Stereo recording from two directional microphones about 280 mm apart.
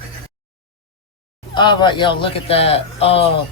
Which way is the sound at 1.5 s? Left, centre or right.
Centre.